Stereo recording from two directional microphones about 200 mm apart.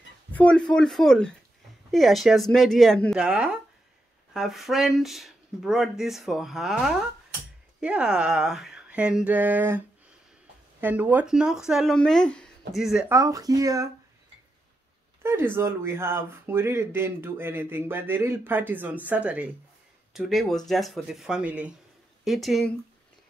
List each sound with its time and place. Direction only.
0.3 s speech: 5° left (ahead or behind)
13.1 s speech: 15° right (ahead or behind)
15.2 s speech: 10° right (ahead or behind)